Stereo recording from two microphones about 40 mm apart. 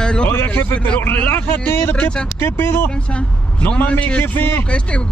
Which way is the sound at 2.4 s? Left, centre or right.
Left.